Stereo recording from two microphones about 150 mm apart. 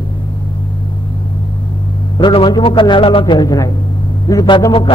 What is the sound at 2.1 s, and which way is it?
A man's voice, 35° left (ahead or behind).